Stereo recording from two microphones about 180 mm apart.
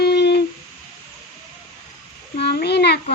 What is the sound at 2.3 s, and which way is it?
Speech, 65° left (ahead or behind).